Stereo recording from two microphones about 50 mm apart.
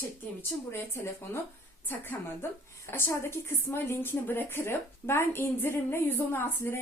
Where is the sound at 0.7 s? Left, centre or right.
Left.